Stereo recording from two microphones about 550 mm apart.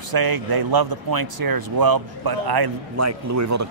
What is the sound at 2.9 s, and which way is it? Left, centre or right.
Speech, right.